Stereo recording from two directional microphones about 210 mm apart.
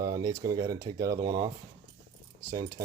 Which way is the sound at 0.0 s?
15° right (ahead or behind).